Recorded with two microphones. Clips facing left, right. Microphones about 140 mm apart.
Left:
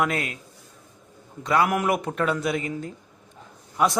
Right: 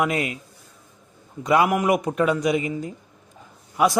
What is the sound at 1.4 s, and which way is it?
Speech, 20° right (ahead or behind).